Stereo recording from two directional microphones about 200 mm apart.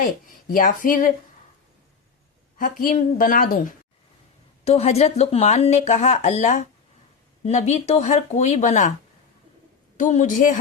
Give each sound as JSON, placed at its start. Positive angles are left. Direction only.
{"t": 0.0, "sound": "speech", "side_deg": 45}
{"t": 2.6, "sound": "speech", "side_deg": 40}
{"t": 4.6, "sound": "speech", "side_deg": 30}
{"t": 10.0, "sound": "speech", "side_deg": 40}